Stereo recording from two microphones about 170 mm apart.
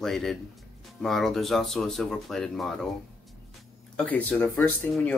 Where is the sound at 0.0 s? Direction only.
Centre (ahead or behind).